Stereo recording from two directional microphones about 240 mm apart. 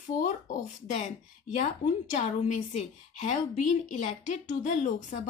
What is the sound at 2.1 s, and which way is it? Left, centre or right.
A woman's voice, left.